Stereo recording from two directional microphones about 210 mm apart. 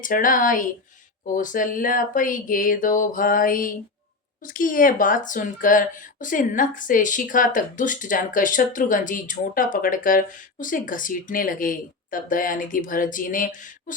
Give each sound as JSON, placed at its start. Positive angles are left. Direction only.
{"t": 0.0, "sound": "speech", "side_deg": 40}